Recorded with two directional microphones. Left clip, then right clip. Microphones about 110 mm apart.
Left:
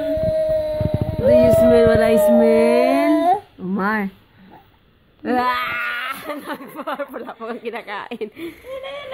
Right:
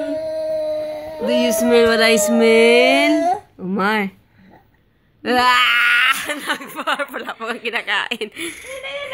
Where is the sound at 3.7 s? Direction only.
25° right (ahead or behind).